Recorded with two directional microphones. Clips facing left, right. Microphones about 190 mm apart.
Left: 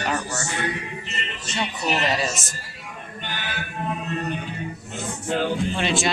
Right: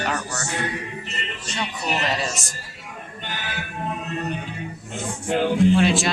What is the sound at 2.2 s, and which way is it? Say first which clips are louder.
Speech: left 1 dB; centre (ahead or behind).